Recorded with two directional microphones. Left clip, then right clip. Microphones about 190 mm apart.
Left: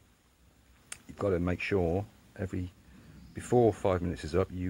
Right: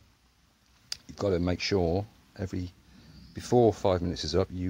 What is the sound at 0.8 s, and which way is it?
Speech, 25° right (ahead or behind).